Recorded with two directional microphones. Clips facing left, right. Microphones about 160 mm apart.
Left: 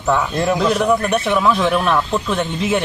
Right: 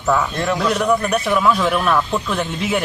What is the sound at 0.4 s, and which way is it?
Speech, 15° left (ahead or behind).